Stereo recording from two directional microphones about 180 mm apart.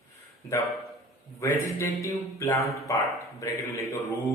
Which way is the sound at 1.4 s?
15° left (ahead or behind).